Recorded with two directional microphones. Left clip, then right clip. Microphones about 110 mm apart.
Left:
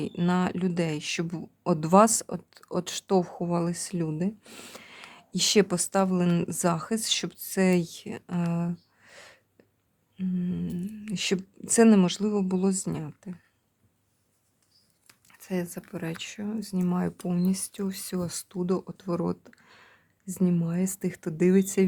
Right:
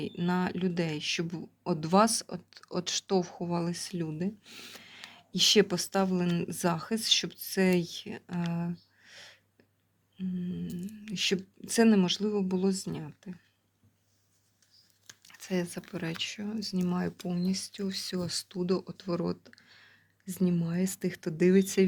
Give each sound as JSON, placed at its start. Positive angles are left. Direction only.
{"t": 0.0, "sound": "speech", "side_deg": 40}
{"t": 4.4, "sound": "speech", "side_deg": 55}
{"t": 4.7, "sound": "speech", "side_deg": 35}
{"t": 8.5, "sound": "a sound", "side_deg": 40}
{"t": 10.2, "sound": "speech", "side_deg": 50}
{"t": 15.2, "sound": "a sound", "side_deg": 10}
{"t": 15.9, "sound": "speech", "side_deg": 10}
{"t": 16.1, "sound": "speech", "side_deg": 25}
{"t": 17.2, "sound": "speech", "side_deg": 45}
{"t": 17.5, "sound": "speech", "side_deg": 60}